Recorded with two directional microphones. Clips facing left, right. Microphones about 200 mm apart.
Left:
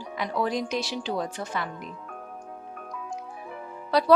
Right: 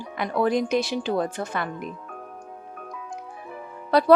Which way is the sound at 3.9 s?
55° right (ahead or behind).